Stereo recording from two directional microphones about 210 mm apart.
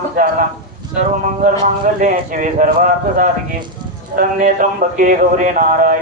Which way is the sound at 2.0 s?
40° right (ahead or behind).